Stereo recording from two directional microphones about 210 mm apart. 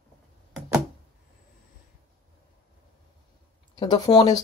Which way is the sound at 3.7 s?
20° left (ahead or behind).